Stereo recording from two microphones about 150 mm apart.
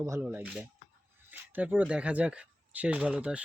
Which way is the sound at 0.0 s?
15° right (ahead or behind).